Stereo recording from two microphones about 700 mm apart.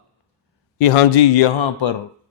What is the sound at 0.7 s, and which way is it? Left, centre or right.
A man's voice, left.